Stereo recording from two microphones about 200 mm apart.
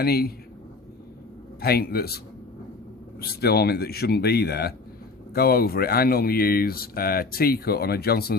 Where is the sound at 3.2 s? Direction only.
50° left (ahead or behind).